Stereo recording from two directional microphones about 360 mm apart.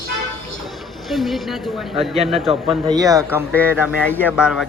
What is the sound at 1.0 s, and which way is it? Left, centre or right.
Speech, centre.